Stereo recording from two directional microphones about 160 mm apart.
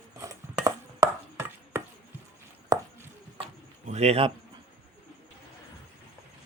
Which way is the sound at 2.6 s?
15° right (ahead or behind).